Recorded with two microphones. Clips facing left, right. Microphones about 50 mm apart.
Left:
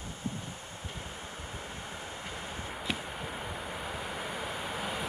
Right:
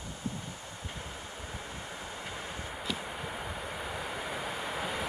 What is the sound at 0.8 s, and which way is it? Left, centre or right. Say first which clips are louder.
Train: even; centre.